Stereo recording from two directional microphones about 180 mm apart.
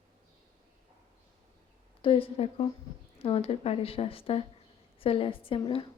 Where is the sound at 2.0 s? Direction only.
30° left (ahead or behind).